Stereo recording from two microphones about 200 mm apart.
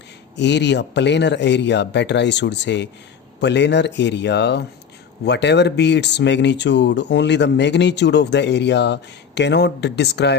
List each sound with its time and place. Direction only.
0.3 s speech: 60° left (ahead or behind)